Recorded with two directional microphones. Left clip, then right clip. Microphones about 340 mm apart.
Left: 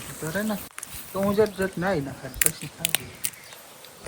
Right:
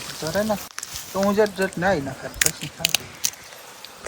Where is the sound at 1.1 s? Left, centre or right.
Right.